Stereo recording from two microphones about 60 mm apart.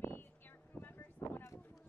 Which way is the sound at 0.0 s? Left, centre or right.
Left.